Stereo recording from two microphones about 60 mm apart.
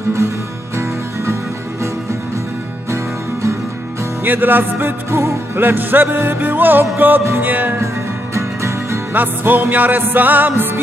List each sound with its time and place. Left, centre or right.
4.2 s music: right
8.4 s music: right
9.1 s music: right